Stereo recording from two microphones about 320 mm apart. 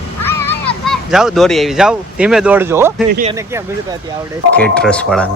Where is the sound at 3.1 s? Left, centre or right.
Right.